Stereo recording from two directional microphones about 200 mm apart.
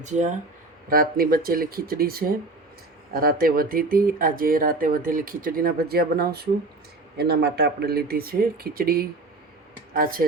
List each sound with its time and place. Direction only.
0.0 s speech: 35° right (ahead or behind)
0.9 s speech: 45° right (ahead or behind)